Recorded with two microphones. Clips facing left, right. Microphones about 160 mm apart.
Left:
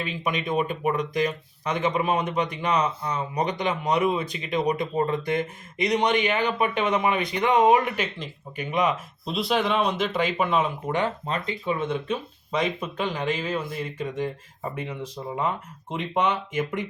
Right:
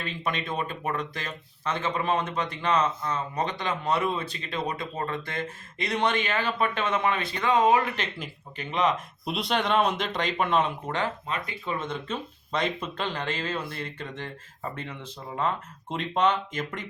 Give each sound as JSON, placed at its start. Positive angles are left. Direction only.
{"t": 0.3, "sound": "speech", "side_deg": 15}
{"t": 9.2, "sound": "speech", "side_deg": 0}